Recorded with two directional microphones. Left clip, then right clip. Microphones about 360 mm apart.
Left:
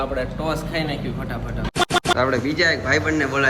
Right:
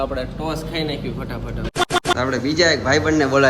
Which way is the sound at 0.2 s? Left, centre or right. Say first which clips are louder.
Left 1 dB; centre.